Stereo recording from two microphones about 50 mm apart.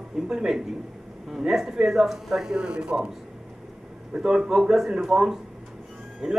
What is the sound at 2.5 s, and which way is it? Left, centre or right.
Speech, centre.